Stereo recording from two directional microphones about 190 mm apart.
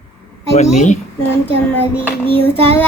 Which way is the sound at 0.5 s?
35° left (ahead or behind).